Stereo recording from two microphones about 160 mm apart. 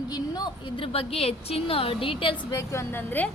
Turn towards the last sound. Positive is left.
turn(degrees=10)  # may be behind; listen again after turning